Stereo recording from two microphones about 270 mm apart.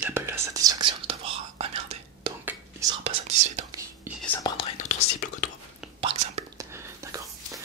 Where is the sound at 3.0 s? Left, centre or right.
Right.